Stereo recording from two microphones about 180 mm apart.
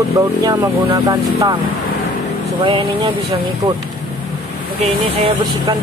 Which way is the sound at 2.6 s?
25° right (ahead or behind).